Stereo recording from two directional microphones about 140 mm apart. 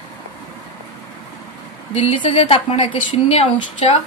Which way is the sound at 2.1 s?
40° left (ahead or behind).